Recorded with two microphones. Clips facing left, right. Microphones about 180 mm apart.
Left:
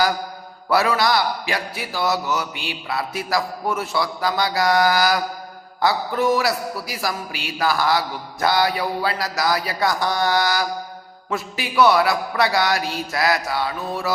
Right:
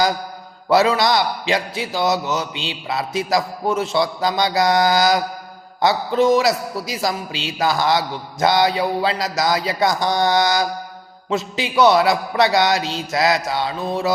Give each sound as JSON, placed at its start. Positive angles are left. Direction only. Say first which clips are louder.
{"t": 0.7, "sound": "a man's voice", "louder": "right 3 dB", "side_deg": -20}